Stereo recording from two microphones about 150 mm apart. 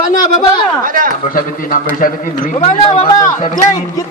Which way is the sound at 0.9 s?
65° right (ahead or behind).